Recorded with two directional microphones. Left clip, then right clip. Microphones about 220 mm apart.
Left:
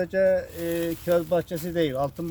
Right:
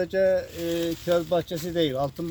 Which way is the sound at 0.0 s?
Centre (ahead or behind).